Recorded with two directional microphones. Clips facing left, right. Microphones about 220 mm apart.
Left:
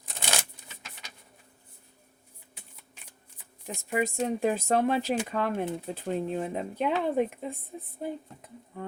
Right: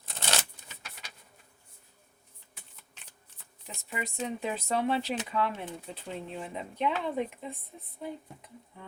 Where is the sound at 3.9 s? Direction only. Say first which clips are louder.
Left 7 dB; 45° left (ahead or behind).